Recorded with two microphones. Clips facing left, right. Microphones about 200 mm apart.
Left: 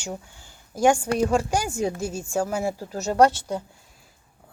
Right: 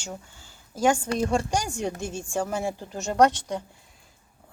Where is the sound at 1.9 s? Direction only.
35° left (ahead or behind).